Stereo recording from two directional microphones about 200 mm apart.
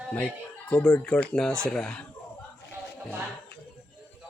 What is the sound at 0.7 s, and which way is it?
A man's voice, 5° left (ahead or behind).